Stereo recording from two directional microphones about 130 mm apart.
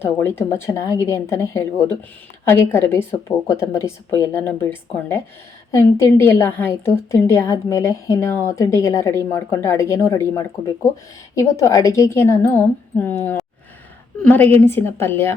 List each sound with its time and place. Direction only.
0.0 s a woman's voice: 15° left (ahead or behind)